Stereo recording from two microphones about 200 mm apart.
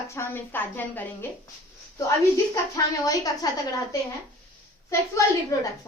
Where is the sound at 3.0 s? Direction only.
20° left (ahead or behind).